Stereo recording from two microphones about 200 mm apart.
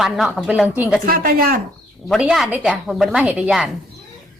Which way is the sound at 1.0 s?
45° right (ahead or behind).